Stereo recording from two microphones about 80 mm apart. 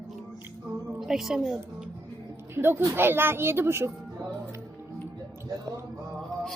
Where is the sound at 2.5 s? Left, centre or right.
Right.